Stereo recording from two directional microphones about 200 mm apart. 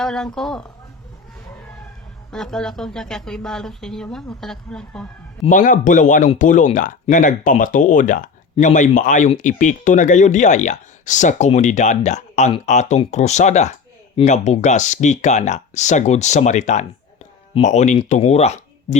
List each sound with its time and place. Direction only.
0.0 s speech: centre (ahead or behind)
2.3 s speech: centre (ahead or behind)
5.5 s speech: 40° left (ahead or behind)